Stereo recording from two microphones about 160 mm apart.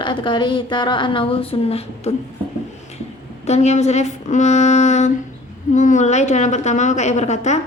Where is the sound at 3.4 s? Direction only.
45° left (ahead or behind).